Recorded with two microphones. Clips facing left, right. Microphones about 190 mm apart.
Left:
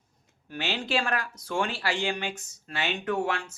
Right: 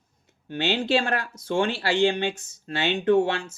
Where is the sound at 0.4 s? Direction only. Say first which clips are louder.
Right 7 dB; 25° right (ahead or behind).